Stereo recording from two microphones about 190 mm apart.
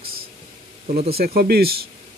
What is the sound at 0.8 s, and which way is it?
Speech, 55° right (ahead or behind).